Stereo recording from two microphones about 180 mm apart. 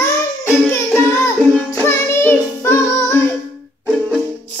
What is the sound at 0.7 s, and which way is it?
Music, 15° left (ahead or behind).